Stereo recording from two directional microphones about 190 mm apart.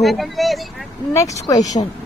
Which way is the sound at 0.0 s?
Centre (ahead or behind).